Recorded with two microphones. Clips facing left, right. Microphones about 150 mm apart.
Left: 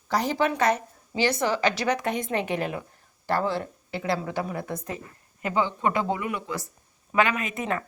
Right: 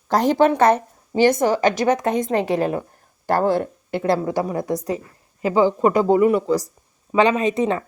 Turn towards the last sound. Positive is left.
turn(degrees=-25)  # may be behind; listen again after turning